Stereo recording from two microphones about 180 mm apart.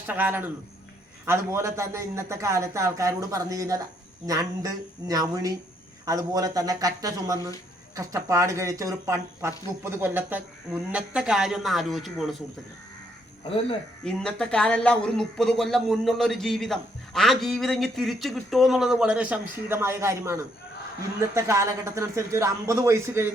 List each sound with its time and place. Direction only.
0.1 s speech: 10° right (ahead or behind)
14.0 s a man's voice: 5° left (ahead or behind); by 23.2 s 15° right (ahead or behind)